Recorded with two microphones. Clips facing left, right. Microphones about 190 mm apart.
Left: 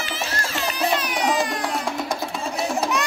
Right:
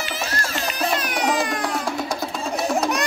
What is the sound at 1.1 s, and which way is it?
Music, centre (ahead or behind).